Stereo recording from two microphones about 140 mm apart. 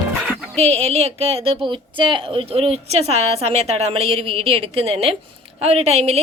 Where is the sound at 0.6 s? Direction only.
50° right (ahead or behind).